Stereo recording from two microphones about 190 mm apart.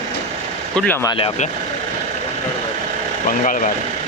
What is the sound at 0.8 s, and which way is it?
Speech, 10° left (ahead or behind).